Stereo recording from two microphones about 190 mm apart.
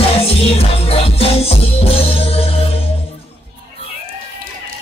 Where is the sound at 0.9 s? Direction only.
30° left (ahead or behind).